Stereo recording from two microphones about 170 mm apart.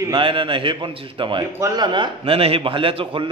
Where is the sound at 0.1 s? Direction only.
30° right (ahead or behind).